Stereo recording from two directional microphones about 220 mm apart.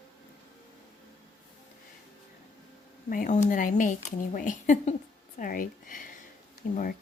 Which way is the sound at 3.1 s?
35° left (ahead or behind).